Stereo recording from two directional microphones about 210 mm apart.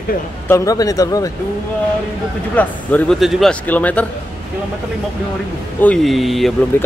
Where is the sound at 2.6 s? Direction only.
5° left (ahead or behind).